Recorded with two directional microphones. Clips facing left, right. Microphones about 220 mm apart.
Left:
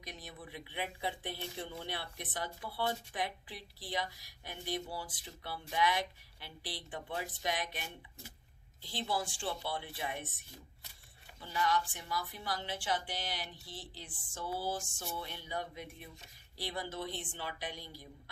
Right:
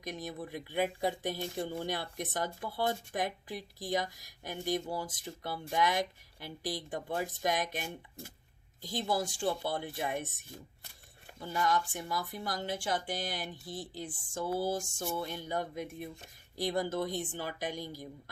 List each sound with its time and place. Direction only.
0.0 s speech: 45° right (ahead or behind)